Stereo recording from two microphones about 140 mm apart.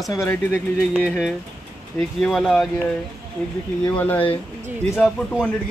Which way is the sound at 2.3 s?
Centre (ahead or behind).